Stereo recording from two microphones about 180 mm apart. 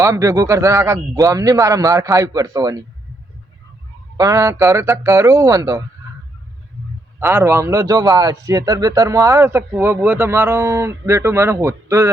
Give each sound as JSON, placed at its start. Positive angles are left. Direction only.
{"t": 0.0, "sound": "a man's voice", "side_deg": -15}
{"t": 4.2, "sound": "a man's voice", "side_deg": -20}
{"t": 7.2, "sound": "a man's voice", "side_deg": -15}